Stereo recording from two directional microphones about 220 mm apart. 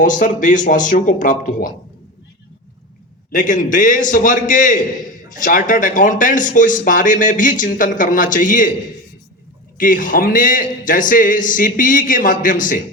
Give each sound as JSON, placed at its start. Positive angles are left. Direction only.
{"t": 0.0, "sound": "speech", "side_deg": 35}
{"t": 3.3, "sound": "speech", "side_deg": 35}
{"t": 9.7, "sound": "speech", "side_deg": 40}